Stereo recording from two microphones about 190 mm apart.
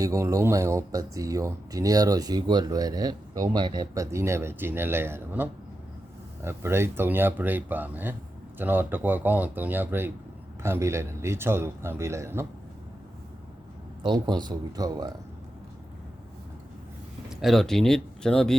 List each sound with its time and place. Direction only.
0.0 s speech: 15° right (ahead or behind)
14.0 s speech: 20° right (ahead or behind)
17.2 s speech: centre (ahead or behind)